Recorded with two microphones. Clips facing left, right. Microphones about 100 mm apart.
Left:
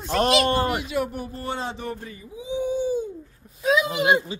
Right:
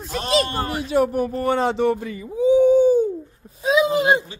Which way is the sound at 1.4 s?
65° right (ahead or behind).